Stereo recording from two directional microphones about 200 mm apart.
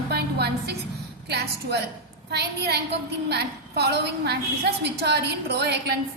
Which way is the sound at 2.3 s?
55° right (ahead or behind).